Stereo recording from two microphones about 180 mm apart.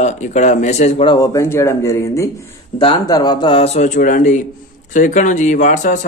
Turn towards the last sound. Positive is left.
turn(degrees=45)  # may be behind; listen again after turning